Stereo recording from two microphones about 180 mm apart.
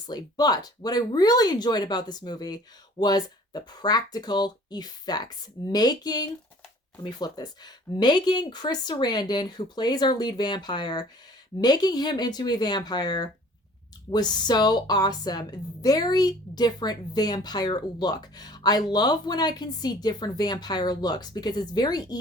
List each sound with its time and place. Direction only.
0.1 s a woman's voice: 20° left (ahead or behind)